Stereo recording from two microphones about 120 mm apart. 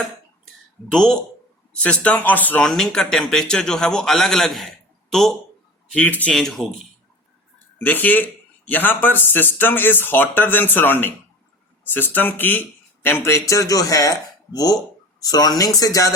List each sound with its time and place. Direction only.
0.9 s a man's voice: 5° left (ahead or behind)
2.6 s a man's voice: 5° left (ahead or behind)
5.9 s a man's voice: 10° left (ahead or behind)
7.8 s a man's voice: 15° left (ahead or behind); by 16.1 s 30° left (ahead or behind)